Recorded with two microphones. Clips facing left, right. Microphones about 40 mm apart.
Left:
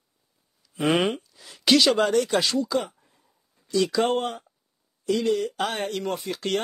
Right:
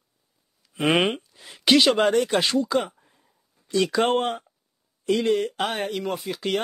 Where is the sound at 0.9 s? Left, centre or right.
Right.